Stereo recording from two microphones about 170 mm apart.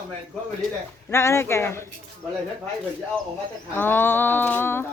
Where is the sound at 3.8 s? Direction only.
10° left (ahead or behind).